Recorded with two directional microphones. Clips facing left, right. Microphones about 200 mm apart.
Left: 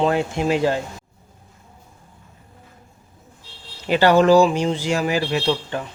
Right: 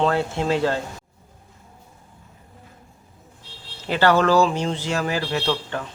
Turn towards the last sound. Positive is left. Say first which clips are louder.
# left 2 dB
turn(degrees=15)  # may be behind; listen again after turning